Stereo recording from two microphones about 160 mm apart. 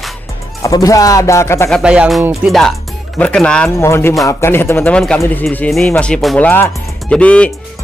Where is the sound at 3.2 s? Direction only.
5° left (ahead or behind).